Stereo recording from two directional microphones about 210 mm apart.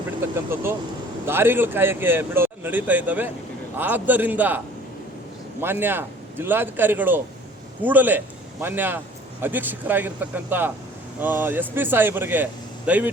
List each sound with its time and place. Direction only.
0.5 s speech: 10° right (ahead or behind)